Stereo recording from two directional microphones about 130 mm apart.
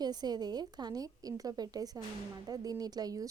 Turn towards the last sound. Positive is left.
turn(degrees=-30)  # may be behind; listen again after turning